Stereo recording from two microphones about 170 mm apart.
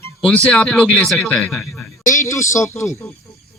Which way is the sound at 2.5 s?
15° left (ahead or behind).